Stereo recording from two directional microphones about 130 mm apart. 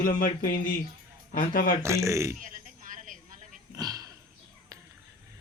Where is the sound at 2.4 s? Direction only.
90° right.